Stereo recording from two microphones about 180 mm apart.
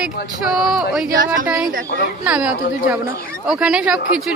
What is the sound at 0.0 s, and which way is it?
A woman's voice, 5° right (ahead or behind).